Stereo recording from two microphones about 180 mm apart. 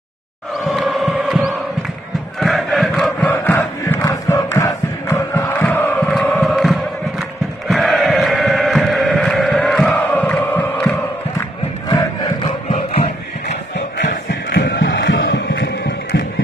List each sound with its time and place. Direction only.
0.7 s chant: centre (ahead or behind)
2.4 s crowd: centre (ahead or behind)
3.3 s crowd: 10° left (ahead or behind)
14.5 s music: 75° left (ahead or behind)